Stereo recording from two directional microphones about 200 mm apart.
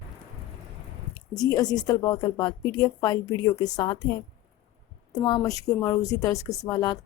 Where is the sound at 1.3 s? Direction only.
20° left (ahead or behind).